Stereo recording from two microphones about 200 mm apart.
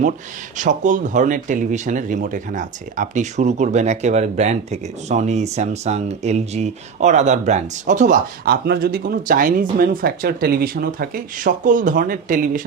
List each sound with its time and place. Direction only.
0.5 s speech: 40° right (ahead or behind)